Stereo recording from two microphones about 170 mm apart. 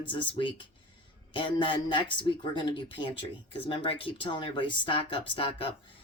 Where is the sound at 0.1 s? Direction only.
30° left (ahead or behind).